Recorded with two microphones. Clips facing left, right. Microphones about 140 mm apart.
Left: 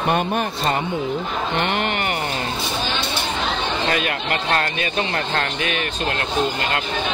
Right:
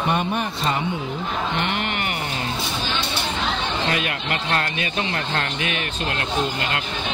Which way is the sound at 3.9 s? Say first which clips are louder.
Left 3 dB; 35° left (ahead or behind).